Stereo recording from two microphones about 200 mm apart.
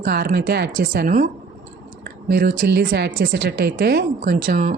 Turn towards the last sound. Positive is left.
turn(degrees=-45)  # may be behind; listen again after turning